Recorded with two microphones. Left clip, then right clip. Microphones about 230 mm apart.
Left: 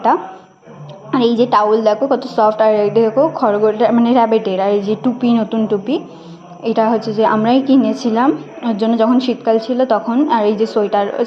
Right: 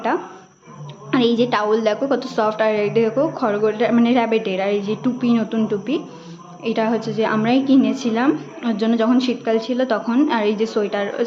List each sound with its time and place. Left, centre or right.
1.1 s a woman's voice: centre